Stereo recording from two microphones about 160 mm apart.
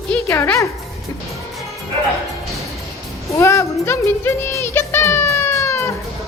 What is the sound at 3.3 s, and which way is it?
Music, 20° left (ahead or behind).